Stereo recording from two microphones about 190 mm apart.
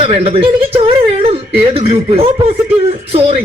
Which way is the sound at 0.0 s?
30° right (ahead or behind).